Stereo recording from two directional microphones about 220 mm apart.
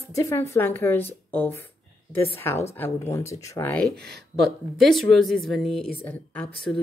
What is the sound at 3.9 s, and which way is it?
Speech, 50° right (ahead or behind).